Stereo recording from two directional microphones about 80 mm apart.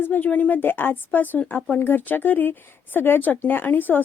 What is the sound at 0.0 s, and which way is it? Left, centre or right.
A woman's voice, left.